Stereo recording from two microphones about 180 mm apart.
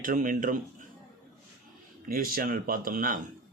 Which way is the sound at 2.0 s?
55° right (ahead or behind).